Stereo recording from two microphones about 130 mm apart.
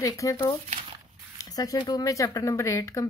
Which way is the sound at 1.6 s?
30° left (ahead or behind).